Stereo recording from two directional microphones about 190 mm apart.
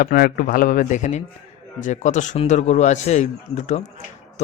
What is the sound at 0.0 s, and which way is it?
A man's voice, 50° left (ahead or behind).